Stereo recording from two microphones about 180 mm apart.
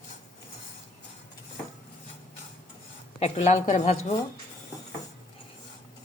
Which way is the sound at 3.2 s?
40° left (ahead or behind).